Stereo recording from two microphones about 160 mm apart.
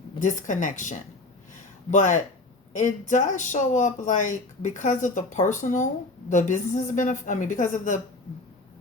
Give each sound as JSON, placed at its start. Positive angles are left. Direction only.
{"t": 0.2, "sound": "speech", "side_deg": 50}